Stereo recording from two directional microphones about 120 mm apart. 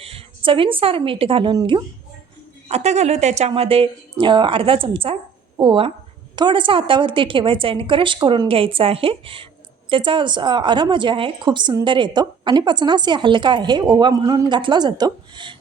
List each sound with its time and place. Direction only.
0.0 s a woman's voice: 50° right (ahead or behind)
2.6 s a woman's voice: 65° right (ahead or behind); by 15.5 s 40° right (ahead or behind)